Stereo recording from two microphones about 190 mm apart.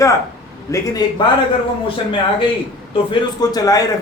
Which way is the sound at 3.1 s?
20° left (ahead or behind).